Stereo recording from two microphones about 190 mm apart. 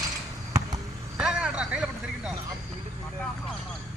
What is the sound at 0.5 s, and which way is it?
Basketball bounce, 15° right (ahead or behind).